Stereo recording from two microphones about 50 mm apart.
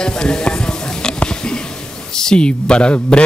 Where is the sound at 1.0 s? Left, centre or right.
Centre.